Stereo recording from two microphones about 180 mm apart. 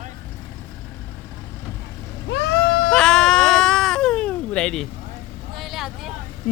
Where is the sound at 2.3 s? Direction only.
65° left (ahead or behind).